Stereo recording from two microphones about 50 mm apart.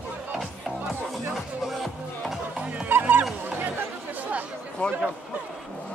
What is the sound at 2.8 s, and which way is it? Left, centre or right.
Goose, right.